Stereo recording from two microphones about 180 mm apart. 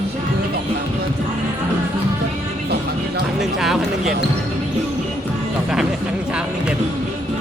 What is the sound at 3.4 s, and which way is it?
Speech, centre (ahead or behind).